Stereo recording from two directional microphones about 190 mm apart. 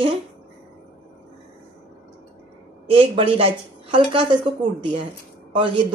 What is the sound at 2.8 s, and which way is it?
A woman's voice, 30° right (ahead or behind).